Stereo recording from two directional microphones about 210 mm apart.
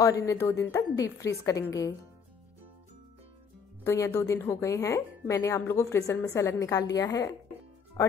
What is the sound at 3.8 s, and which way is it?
A woman's voice, 15° left (ahead or behind).